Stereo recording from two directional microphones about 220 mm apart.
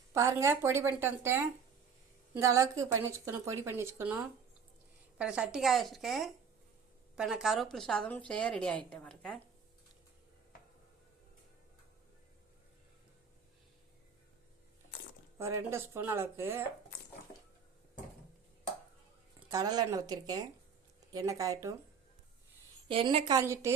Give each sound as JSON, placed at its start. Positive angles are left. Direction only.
{"t": 0.1, "sound": "a woman's voice", "side_deg": -15}
{"t": 15.4, "sound": "a woman's voice", "side_deg": -10}
{"t": 19.5, "sound": "a woman's voice", "side_deg": -15}
{"t": 22.9, "sound": "a woman's voice", "side_deg": -25}